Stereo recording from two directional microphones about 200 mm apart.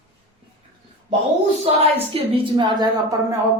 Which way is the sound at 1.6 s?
30° right (ahead or behind).